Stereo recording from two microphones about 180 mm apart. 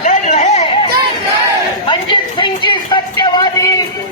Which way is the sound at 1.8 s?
25° left (ahead or behind).